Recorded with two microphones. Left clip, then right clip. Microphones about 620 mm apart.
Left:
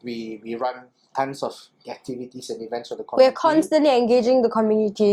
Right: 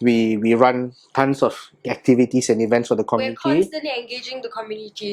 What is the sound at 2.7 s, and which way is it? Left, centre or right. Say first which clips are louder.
Speech: right 11 dB; right.